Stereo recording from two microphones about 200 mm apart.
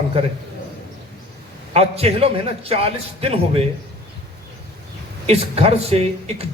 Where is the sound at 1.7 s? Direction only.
30° right (ahead or behind).